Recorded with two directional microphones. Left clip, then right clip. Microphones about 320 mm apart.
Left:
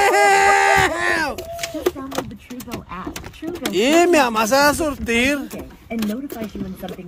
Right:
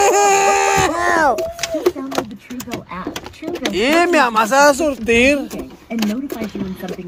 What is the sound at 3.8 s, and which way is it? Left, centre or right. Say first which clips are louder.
Speech: right 1 dB; centre.